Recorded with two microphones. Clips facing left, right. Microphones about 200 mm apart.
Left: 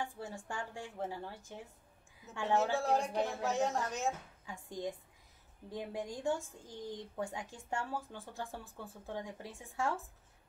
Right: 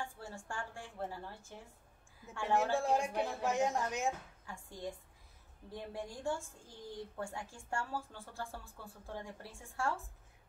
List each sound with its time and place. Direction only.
0.0 s a woman's voice: 15° left (ahead or behind)
2.4 s speech: 10° right (ahead or behind)
4.5 s speech: 15° left (ahead or behind)